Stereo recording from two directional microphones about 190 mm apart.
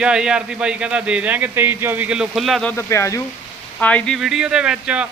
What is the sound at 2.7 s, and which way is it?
A man's voice, 15° left (ahead or behind).